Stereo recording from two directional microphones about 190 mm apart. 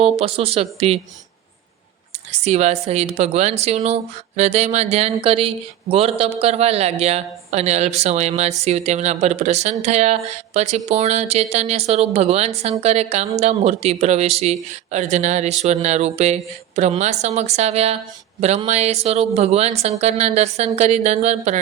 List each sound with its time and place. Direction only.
0.0 s a woman's voice: 30° right (ahead or behind)
2.4 s a woman's voice: 35° right (ahead or behind)